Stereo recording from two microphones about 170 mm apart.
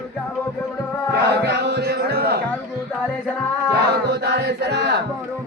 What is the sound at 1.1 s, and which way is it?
Music, 75° right (ahead or behind).